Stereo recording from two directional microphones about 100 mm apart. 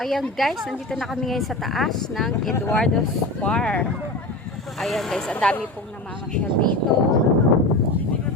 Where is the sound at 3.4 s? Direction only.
10° left (ahead or behind).